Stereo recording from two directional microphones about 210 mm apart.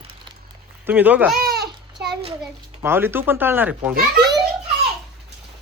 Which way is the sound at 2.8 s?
10° right (ahead or behind).